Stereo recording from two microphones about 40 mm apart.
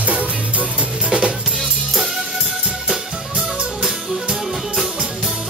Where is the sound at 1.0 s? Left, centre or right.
Right.